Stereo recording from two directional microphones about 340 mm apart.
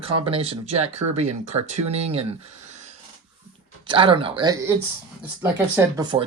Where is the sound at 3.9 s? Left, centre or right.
Centre.